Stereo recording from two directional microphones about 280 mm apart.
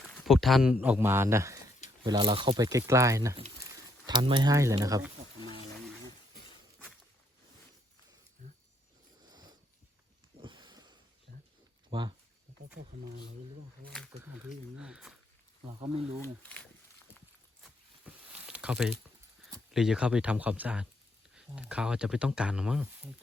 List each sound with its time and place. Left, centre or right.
0.1 s speech: centre
8.4 s a sound: right
14.8 s speech: centre
16.2 s speech: centre
17.6 s a sound: centre
19.7 s speech: centre